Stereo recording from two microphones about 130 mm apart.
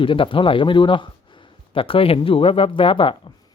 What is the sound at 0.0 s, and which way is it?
Speech, 40° left (ahead or behind).